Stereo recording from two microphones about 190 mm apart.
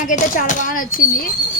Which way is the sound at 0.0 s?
45° left (ahead or behind).